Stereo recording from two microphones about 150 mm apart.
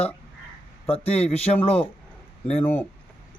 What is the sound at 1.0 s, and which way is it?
Speech, 45° left (ahead or behind).